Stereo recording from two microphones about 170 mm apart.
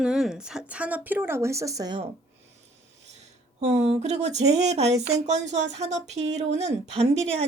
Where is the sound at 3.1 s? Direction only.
40° right (ahead or behind).